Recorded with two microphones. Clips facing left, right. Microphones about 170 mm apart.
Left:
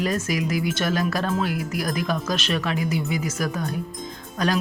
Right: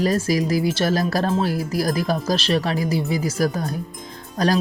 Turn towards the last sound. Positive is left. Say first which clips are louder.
# right 4 dB
turn(degrees=-35)  # may be behind; listen again after turning